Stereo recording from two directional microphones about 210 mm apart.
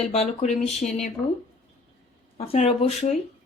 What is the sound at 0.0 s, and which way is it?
Speech, 30° left (ahead or behind).